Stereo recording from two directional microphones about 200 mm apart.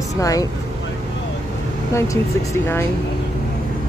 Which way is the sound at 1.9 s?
15° left (ahead or behind).